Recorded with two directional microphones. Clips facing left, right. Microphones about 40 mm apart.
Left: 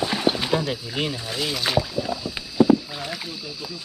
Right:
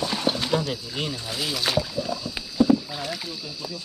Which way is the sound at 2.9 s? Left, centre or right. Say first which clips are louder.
Even; centre.